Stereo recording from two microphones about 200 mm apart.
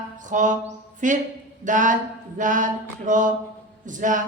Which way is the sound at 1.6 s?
40° right (ahead or behind).